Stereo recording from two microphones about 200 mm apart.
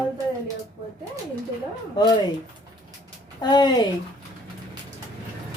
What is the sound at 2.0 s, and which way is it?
Speech, 20° left (ahead or behind).